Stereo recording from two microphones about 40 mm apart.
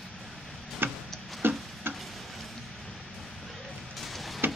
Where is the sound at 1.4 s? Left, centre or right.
Right.